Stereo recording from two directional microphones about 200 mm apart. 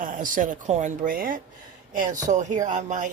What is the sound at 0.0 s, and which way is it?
Speech, 40° right (ahead or behind).